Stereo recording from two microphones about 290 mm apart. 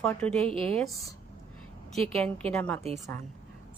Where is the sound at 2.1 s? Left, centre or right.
Centre.